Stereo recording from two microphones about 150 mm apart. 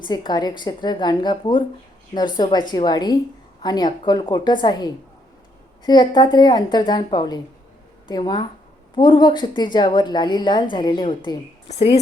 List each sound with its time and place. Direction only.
0.0 s a woman's voice: 30° left (ahead or behind)